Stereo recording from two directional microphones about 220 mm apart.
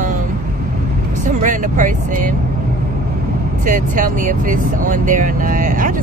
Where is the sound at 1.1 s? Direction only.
35° right (ahead or behind).